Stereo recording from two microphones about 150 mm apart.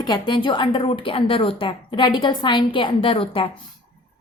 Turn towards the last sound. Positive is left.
turn(degrees=35)  # may be behind; listen again after turning